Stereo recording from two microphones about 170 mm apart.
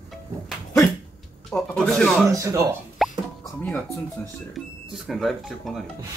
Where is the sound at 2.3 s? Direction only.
20° right (ahead or behind).